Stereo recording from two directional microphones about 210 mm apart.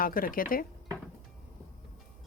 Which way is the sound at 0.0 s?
45° left (ahead or behind).